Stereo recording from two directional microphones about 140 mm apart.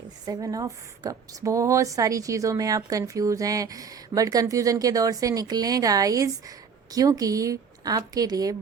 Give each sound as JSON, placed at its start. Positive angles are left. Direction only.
{"t": 0.3, "sound": "a woman's voice", "side_deg": -25}